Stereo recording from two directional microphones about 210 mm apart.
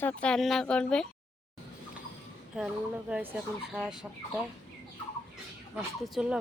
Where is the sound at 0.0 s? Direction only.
5° left (ahead or behind).